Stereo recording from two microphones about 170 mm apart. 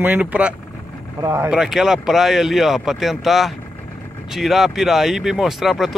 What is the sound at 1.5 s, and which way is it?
Speech, 5° right (ahead or behind).